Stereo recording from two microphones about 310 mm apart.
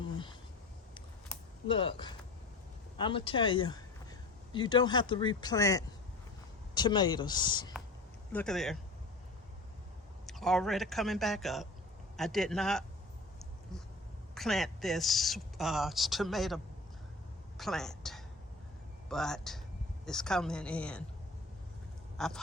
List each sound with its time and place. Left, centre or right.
1.6 s speech: centre
8.3 s speech: centre
10.2 s speech: centre
14.3 s speech: centre
17.6 s a woman's voice: centre
22.2 s speech: centre